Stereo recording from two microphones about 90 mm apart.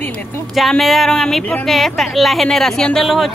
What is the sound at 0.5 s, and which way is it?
Speech, centre (ahead or behind).